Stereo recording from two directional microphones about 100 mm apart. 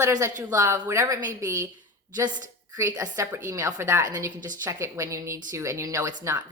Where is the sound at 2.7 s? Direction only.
35° right (ahead or behind).